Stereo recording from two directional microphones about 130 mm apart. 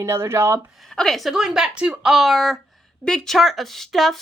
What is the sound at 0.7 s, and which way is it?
Speech, centre (ahead or behind).